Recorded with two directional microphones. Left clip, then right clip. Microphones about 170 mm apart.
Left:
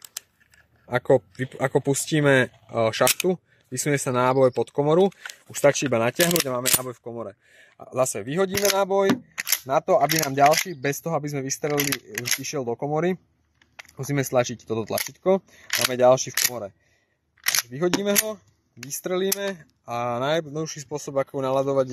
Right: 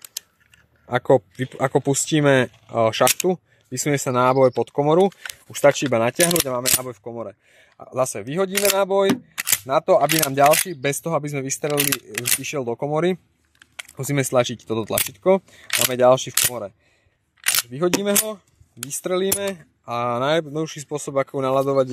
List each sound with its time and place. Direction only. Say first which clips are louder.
0.8 s speech: right 3 dB; 30° right (ahead or behind)
6.8 s speech: right 2 dB; 15° right (ahead or behind)
11.6 s speech: right 3 dB; 10° right (ahead or behind)
12.4 s speech: right 3 dB; 25° right (ahead or behind)
13.7 s speech: right 3 dB; 35° right (ahead or behind); by 16.3 s 20° right (ahead or behind)
17.6 s speech: right 3 dB; 15° right (ahead or behind); by 21.9 s 35° right (ahead or behind)